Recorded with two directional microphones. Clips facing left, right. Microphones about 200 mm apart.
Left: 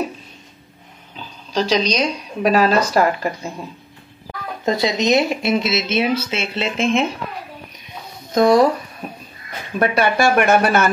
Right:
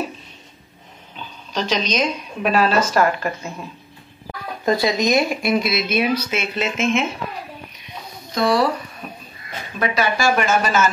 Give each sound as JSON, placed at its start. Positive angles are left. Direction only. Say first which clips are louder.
{"t": 1.1, "sound": "a woman's voice", "louder": "left 4 dB", "side_deg": 35}
{"t": 2.9, "sound": "speech", "louder": "left 1 dB", "side_deg": 15}
{"t": 4.6, "sound": "speech", "louder": "left 1 dB", "side_deg": 20}
{"t": 8.4, "sound": "speech", "louder": "left 5 dB", "side_deg": 45}
{"t": 9.8, "sound": "speech", "louder": "left 4 dB", "side_deg": 55}